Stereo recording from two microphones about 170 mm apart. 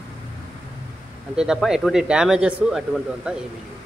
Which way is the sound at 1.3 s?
5° right (ahead or behind).